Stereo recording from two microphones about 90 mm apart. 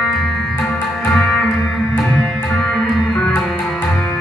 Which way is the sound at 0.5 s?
20° left (ahead or behind).